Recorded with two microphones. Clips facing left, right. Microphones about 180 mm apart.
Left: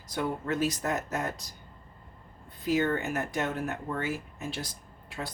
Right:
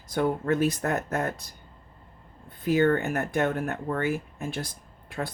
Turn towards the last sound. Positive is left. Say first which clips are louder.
# right 5 dB
turn(degrees=-55)  # may be behind; listen again after turning